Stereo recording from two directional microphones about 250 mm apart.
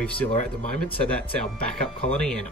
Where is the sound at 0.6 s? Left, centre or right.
Left.